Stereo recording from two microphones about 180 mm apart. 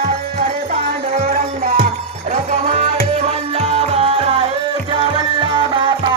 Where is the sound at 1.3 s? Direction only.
50° right (ahead or behind).